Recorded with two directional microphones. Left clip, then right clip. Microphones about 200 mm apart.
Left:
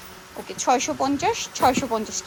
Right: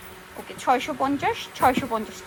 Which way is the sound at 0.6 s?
25° left (ahead or behind).